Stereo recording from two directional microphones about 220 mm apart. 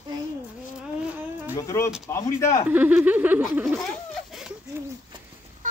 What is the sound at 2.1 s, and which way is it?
Speech, 10° left (ahead or behind).